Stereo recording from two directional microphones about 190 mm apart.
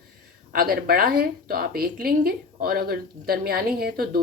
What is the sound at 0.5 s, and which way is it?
A woman's voice, 50° right (ahead or behind).